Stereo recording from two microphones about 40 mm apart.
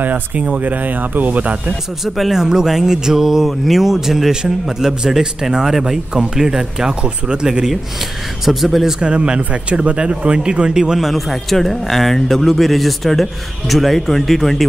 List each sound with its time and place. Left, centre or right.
0.0 s speech: right
2.0 s speech: centre
2.3 s a man's voice: centre
7.0 s speech: right
8.5 s speech: centre
9.0 s speech: right
10.8 s a man's voice: centre
11.1 s speech: centre